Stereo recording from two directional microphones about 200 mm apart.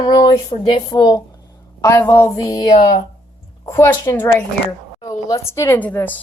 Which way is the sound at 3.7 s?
15° left (ahead or behind).